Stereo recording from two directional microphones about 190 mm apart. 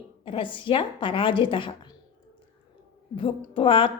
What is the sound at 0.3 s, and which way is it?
Speech, 25° left (ahead or behind).